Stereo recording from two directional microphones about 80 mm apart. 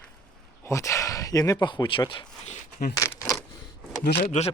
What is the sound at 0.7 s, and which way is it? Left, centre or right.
Speech, left.